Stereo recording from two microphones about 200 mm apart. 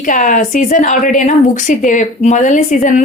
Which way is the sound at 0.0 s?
40° left (ahead or behind).